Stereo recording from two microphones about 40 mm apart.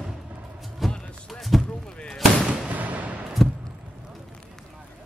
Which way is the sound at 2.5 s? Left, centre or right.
Right.